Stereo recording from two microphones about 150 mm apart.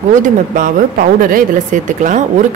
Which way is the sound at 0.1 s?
60° right (ahead or behind).